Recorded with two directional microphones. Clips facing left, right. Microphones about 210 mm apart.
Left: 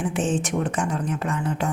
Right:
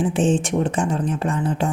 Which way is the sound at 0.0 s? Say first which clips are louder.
Right 5 dB; 30° right (ahead or behind).